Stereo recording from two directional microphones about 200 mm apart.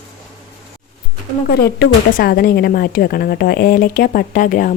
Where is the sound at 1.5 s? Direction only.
50° left (ahead or behind).